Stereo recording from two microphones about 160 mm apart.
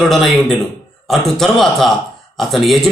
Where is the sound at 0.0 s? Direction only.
Centre (ahead or behind).